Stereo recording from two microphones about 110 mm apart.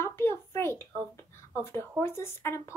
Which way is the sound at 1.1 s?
20° left (ahead or behind).